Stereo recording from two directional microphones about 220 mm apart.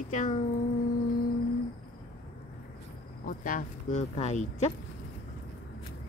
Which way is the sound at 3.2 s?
40° left (ahead or behind).